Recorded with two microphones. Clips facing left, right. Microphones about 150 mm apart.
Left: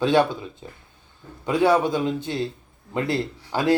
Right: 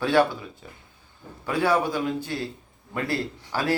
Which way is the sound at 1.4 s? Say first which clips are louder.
Left 4 dB; 20° left (ahead or behind).